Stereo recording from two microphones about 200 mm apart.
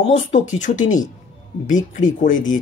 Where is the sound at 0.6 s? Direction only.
40° left (ahead or behind).